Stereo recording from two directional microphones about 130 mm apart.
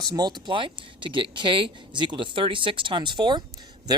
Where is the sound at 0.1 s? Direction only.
30° right (ahead or behind).